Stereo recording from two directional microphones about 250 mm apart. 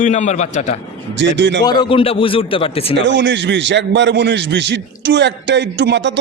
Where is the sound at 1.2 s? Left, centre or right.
Right.